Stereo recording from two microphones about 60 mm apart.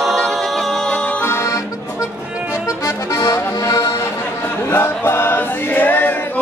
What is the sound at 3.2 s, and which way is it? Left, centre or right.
Accordion, left.